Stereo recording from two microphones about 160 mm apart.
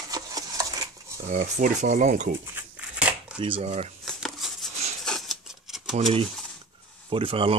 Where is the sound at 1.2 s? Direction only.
45° right (ahead or behind).